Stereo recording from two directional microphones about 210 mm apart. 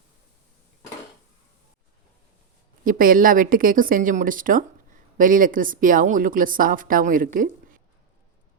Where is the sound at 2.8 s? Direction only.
40° right (ahead or behind).